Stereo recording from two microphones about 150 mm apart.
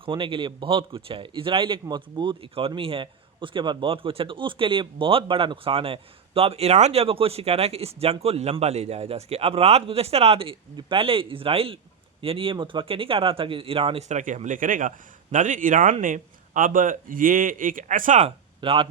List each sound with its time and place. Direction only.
0.0 s a man's voice: 35° right (ahead or behind); by 18.3 s 60° right (ahead or behind)
18.3 s speech: 35° right (ahead or behind)